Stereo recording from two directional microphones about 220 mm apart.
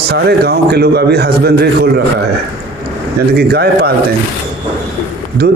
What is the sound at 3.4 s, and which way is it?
Speech, 45° right (ahead or behind).